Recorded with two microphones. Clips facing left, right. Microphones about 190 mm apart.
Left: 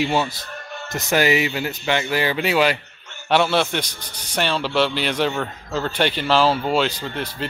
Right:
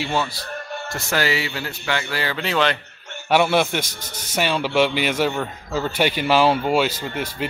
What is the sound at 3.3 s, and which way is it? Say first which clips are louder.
Speech: right 1 dB; 10° right (ahead or behind).